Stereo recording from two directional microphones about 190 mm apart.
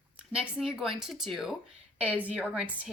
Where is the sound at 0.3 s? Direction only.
5° right (ahead or behind).